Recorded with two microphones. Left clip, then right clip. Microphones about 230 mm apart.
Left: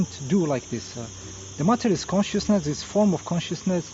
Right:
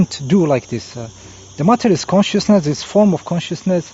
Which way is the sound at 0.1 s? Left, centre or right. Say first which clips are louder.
Right 9 dB; right.